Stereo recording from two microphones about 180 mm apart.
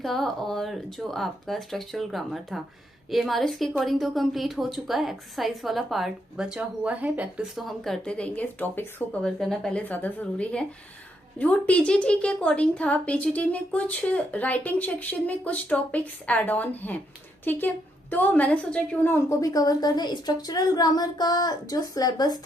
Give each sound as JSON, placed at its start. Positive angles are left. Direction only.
{"t": 0.0, "sound": "a woman's voice", "side_deg": 0}